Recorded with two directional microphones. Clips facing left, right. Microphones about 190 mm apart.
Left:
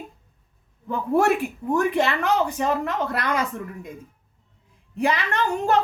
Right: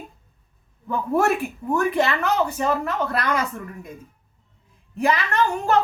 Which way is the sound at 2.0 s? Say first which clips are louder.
Even; 15° left (ahead or behind).